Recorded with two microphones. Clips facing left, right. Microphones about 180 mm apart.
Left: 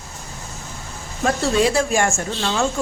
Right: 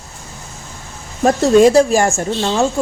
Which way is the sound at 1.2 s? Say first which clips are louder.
Right 9 dB; 45° right (ahead or behind).